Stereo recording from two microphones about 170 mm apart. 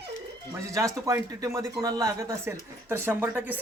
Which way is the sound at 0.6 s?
20° right (ahead or behind).